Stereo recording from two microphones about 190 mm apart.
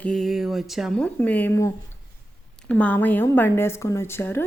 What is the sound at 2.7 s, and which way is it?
A woman's voice, 5° left (ahead or behind).